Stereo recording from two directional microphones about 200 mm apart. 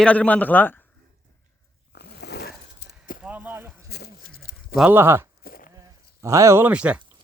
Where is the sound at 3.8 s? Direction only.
50° left (ahead or behind).